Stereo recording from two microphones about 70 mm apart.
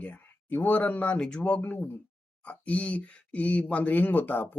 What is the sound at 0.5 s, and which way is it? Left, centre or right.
Speech, left.